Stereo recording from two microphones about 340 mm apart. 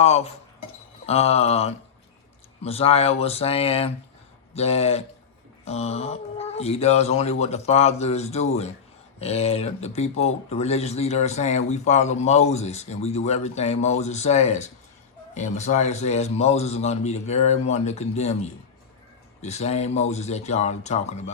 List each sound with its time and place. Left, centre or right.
0.0 s a man's voice: centre